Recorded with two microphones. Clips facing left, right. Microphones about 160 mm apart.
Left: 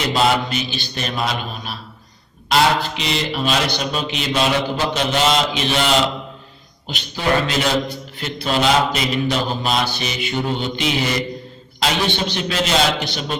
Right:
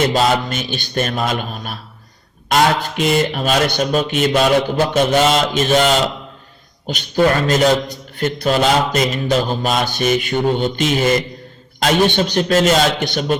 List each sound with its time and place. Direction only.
0.0 s speech: 45° right (ahead or behind)